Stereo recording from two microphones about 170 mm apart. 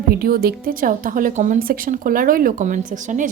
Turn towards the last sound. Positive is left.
turn(degrees=-50)  # may be behind; listen again after turning